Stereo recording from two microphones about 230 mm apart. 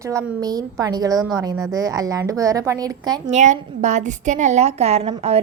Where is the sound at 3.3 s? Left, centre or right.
Right.